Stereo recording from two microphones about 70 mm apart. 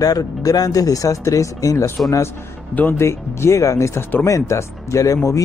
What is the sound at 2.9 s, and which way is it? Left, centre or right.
Speech, left.